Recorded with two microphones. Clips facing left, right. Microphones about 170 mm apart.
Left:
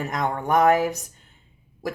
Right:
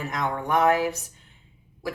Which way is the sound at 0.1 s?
45° left (ahead or behind).